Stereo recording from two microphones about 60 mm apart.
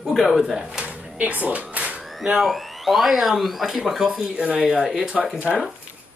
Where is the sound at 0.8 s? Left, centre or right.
Right.